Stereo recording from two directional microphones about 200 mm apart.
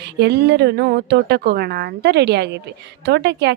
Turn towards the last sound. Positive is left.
turn(degrees=-55)  # may be behind; listen again after turning